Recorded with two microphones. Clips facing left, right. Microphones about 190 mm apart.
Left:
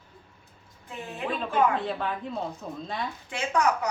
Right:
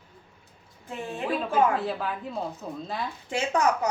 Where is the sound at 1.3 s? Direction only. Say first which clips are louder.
Right 1 dB; 5° right (ahead or behind).